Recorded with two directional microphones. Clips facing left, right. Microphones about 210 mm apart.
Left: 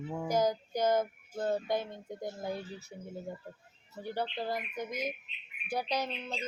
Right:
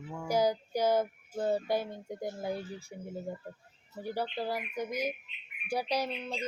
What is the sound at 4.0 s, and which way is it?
Child singing, 10° right (ahead or behind).